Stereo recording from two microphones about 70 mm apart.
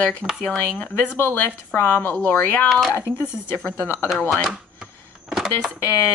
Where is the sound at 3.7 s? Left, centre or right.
Left.